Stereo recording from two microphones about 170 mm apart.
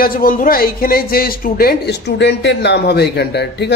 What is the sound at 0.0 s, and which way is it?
A man's voice, 55° left (ahead or behind).